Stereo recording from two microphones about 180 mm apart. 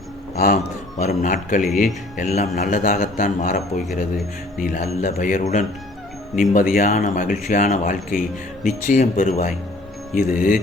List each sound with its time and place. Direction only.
0.3 s speech: 50° left (ahead or behind)